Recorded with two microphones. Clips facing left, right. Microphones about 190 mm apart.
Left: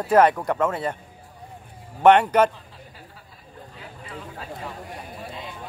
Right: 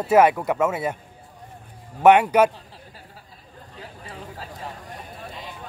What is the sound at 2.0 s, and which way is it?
Speech, 10° right (ahead or behind).